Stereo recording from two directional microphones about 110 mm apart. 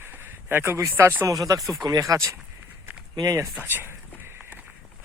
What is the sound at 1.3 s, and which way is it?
Speech, 35° right (ahead or behind).